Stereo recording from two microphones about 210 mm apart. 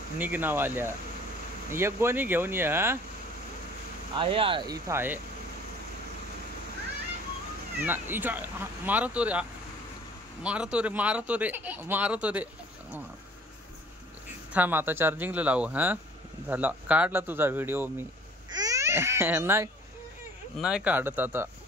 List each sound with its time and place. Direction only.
0.2 s speech: 10° right (ahead or behind)
4.1 s speech: 25° right (ahead or behind); by 5.2 s 10° right (ahead or behind)
7.8 s speech: 10° right (ahead or behind)
14.5 s speech: 10° right (ahead or behind)